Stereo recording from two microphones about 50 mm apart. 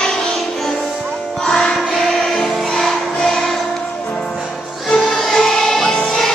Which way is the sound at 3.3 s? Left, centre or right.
Centre.